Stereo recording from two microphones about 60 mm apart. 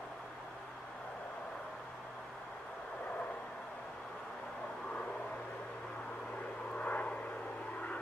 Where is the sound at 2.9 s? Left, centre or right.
Left.